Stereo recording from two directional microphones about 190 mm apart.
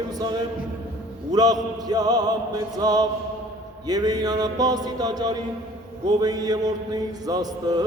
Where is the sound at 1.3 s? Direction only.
20° right (ahead or behind).